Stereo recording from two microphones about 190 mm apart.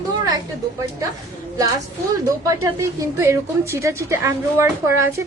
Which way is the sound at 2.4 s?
15° right (ahead or behind).